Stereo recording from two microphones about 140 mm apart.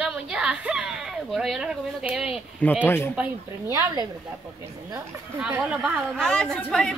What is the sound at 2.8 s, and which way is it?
Speech, 15° left (ahead or behind).